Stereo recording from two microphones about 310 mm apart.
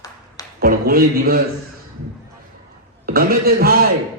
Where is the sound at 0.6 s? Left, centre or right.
Right.